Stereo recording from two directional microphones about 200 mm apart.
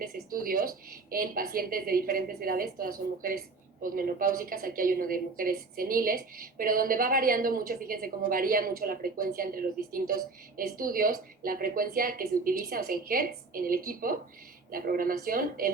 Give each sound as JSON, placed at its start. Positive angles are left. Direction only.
{"t": 0.3, "sound": "a woman's voice", "side_deg": -45}